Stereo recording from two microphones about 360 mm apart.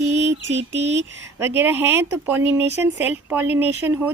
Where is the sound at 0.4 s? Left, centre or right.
Right.